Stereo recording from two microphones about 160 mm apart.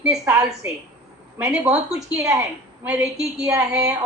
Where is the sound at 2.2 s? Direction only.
20° right (ahead or behind).